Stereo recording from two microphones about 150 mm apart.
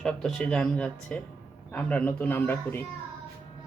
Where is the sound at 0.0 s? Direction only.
5° left (ahead or behind).